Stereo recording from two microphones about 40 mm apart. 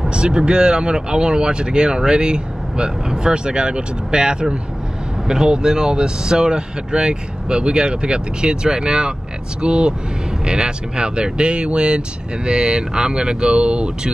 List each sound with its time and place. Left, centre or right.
0.1 s speech: right